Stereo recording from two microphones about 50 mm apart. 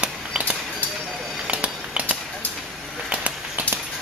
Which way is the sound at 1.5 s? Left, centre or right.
Right.